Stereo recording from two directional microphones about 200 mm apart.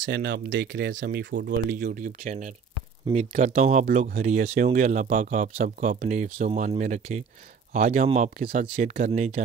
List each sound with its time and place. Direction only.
0.0 s speech: 55° right (ahead or behind)
1.7 s speech: 40° right (ahead or behind)